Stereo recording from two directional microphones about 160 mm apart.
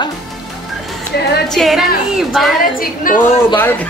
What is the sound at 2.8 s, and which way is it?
Speech, 60° left (ahead or behind).